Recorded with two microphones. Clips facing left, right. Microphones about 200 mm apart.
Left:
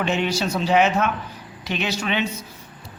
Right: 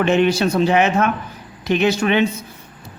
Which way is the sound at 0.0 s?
55° right (ahead or behind).